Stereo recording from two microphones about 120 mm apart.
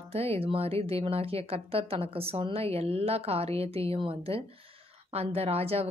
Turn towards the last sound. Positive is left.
turn(degrees=-55)  # may be behind; listen again after turning